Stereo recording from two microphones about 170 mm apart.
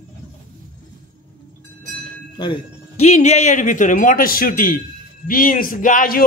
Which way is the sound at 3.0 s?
40° left (ahead or behind).